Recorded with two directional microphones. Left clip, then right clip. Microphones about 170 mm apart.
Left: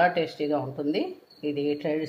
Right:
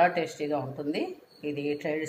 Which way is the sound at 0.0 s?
55° left (ahead or behind).